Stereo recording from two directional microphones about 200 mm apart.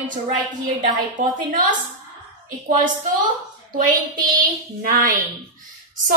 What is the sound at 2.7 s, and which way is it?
A woman's voice, 40° right (ahead or behind).